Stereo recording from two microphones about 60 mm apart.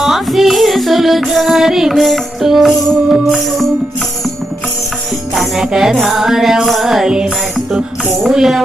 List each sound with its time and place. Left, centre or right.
0.0 s music: centre
5.3 s music: centre
8.2 s mechanisms: centre